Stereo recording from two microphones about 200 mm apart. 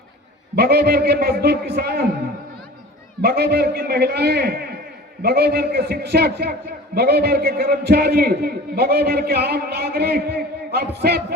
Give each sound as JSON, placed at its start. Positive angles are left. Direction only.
{"t": 0.5, "sound": "a man's voice", "side_deg": -50}
{"t": 3.2, "sound": "a man's voice", "side_deg": -55}